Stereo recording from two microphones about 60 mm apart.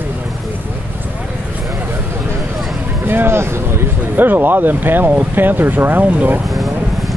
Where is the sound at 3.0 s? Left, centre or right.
Right.